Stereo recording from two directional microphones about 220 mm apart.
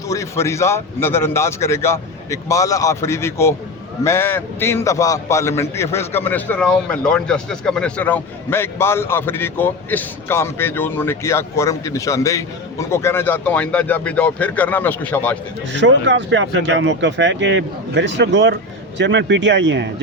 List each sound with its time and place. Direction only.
0.1 s a man's voice: 15° left (ahead or behind)
15.7 s speech: 55° right (ahead or behind)